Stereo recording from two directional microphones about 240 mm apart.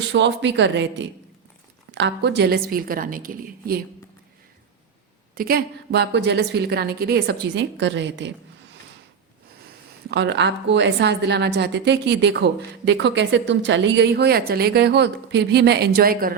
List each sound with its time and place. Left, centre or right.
0.1 s a woman's voice: right
5.3 s a woman's voice: right
10.1 s a woman's voice: right